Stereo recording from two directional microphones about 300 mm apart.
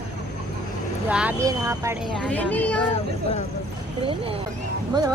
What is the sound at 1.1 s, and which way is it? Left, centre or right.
Speech, centre.